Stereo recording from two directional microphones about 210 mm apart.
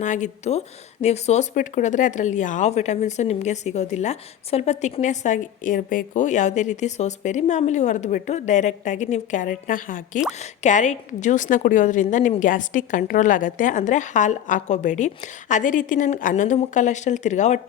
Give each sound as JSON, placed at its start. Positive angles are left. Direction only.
{"t": 0.0, "sound": "speech", "side_deg": 35}